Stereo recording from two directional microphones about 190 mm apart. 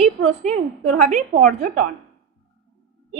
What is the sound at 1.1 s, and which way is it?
Speech, 45° right (ahead or behind).